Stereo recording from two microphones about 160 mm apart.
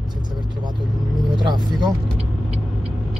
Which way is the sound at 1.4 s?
25° right (ahead or behind).